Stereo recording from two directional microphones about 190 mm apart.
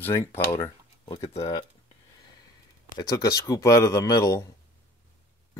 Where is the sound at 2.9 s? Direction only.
20° left (ahead or behind).